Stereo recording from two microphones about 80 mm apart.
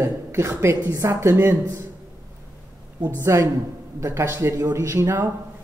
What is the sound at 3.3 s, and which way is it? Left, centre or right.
Speech, right.